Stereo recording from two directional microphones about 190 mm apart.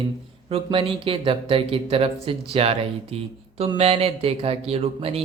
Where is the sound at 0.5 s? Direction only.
30° right (ahead or behind).